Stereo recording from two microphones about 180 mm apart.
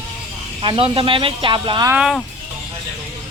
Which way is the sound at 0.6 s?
30° right (ahead or behind).